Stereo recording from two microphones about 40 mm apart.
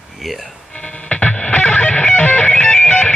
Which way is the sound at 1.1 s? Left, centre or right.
Left.